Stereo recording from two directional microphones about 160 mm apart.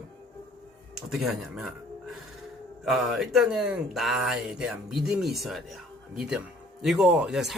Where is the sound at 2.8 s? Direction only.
Centre (ahead or behind).